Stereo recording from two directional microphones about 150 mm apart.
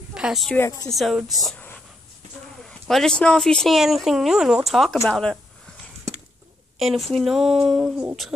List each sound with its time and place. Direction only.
0.1 s a woman's voice: 5° right (ahead or behind)
0.6 s speech: 20° left (ahead or behind)
0.8 s speech: centre (ahead or behind)
2.6 s speech: centre (ahead or behind)
6.8 s speech: centre (ahead or behind)